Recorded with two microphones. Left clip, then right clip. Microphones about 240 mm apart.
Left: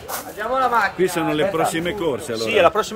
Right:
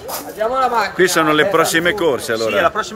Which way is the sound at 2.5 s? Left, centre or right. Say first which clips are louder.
Left 2 dB; left.